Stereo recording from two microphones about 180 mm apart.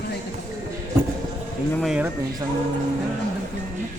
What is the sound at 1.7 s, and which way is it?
Speech, centre (ahead or behind).